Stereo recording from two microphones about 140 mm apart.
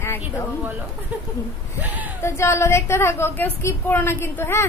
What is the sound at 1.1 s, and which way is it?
Speech, 10° right (ahead or behind).